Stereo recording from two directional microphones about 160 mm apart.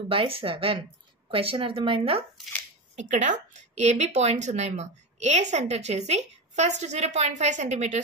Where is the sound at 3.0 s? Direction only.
50° right (ahead or behind).